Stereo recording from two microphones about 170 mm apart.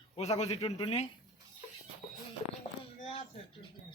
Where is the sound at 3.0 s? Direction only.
30° left (ahead or behind).